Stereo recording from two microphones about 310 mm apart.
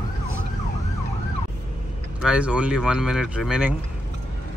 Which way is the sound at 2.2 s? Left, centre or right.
Centre.